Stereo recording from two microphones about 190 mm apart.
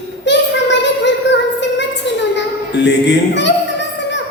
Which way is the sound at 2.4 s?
65° left (ahead or behind).